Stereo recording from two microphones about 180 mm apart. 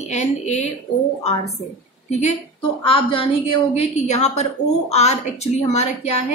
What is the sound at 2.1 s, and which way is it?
Speech, 40° left (ahead or behind).